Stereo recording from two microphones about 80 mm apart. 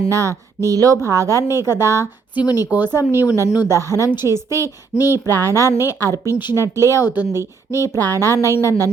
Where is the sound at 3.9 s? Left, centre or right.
Right.